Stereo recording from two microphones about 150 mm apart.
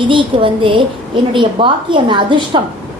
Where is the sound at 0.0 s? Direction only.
35° right (ahead or behind).